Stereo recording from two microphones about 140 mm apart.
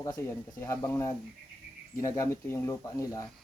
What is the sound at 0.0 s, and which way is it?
Speech, 20° left (ahead or behind).